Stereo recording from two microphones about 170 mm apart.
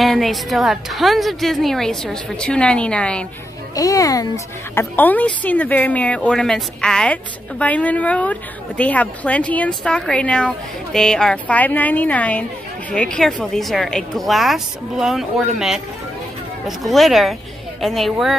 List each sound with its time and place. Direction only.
0.0 s a woman's voice: centre (ahead or behind)
3.7 s a child's voice: 20° left (ahead or behind); by 18.3 s centre (ahead or behind)